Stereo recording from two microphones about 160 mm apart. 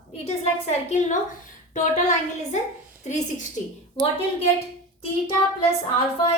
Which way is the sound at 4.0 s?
25° right (ahead or behind).